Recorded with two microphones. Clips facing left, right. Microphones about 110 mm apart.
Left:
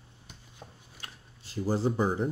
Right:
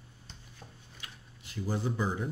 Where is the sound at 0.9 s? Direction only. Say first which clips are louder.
Left 2 dB; 35° left (ahead or behind).